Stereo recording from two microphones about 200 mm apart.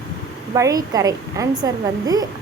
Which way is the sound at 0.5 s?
15° right (ahead or behind).